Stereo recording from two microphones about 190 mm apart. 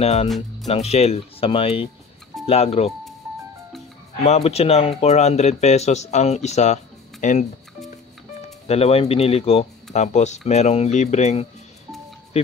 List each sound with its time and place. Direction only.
0.0 s a man's voice: 35° left (ahead or behind)
4.2 s a man's voice: 35° left (ahead or behind)
8.6 s a man's voice: 30° left (ahead or behind)